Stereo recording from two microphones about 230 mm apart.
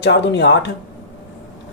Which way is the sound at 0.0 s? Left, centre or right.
Left.